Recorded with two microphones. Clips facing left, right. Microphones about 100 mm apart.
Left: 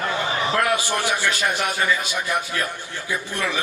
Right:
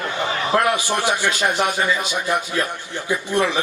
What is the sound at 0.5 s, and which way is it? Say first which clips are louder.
A man's voice: right 5 dB; 20° right (ahead or behind).